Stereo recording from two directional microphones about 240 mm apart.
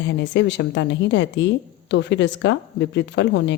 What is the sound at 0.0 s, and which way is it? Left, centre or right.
A woman's voice, left.